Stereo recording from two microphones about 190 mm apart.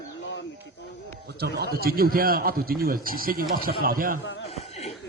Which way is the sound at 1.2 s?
55° right (ahead or behind).